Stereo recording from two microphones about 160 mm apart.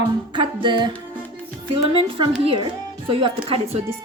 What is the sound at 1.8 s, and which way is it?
Speech, 35° right (ahead or behind).